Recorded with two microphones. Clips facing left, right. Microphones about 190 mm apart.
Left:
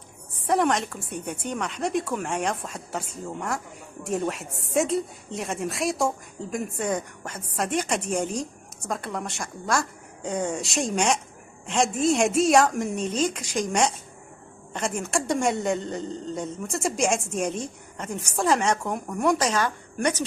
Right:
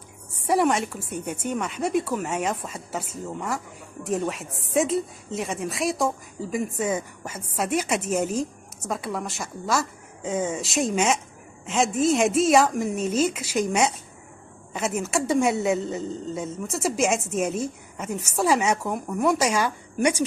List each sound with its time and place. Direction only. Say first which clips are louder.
0.4 s a woman's voice: right 1 dB; 10° right (ahead or behind)